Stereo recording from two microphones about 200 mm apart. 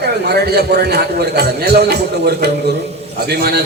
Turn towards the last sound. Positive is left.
turn(degrees=-50)  # may be behind; listen again after turning